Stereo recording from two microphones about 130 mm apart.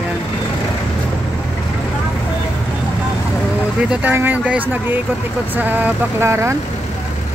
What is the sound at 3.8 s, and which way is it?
Speech, 15° right (ahead or behind).